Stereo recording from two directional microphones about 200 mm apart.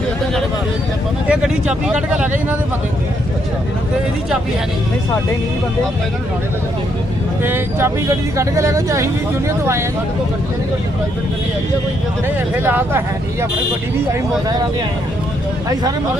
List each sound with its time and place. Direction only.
1.3 s speech: 5° right (ahead or behind)
7.4 s speech: 10° right (ahead or behind)
12.6 s speech: 10° right (ahead or behind)
14.1 s speech: 20° right (ahead or behind)